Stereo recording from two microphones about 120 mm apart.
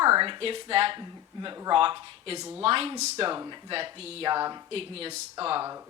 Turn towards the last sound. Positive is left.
turn(degrees=-50)  # may be behind; listen again after turning